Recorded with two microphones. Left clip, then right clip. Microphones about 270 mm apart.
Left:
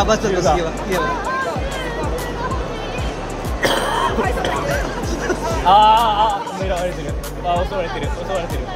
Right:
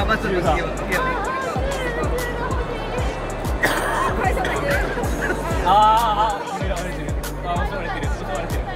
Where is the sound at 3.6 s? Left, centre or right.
Left.